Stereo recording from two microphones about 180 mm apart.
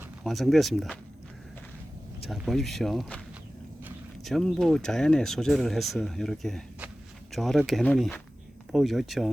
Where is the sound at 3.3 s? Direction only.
10° right (ahead or behind).